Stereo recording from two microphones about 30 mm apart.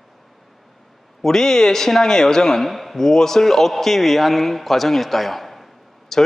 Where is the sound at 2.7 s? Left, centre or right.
Centre.